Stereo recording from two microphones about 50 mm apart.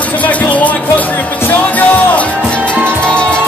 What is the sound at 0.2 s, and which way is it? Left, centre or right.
Music, left.